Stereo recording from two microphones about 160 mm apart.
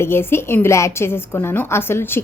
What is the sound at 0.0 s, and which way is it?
A woman's voice, 15° left (ahead or behind).